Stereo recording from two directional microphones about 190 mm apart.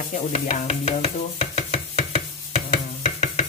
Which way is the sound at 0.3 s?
35° left (ahead or behind).